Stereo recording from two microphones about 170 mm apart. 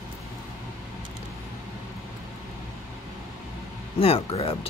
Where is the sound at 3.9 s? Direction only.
35° left (ahead or behind).